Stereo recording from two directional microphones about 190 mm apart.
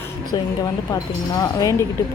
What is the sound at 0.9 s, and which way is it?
Speech, 20° left (ahead or behind).